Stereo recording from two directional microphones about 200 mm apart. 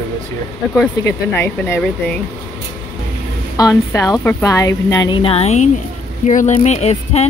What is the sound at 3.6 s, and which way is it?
A woman's voice, 15° left (ahead or behind).